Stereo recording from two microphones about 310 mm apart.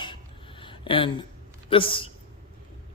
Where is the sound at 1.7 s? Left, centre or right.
Centre.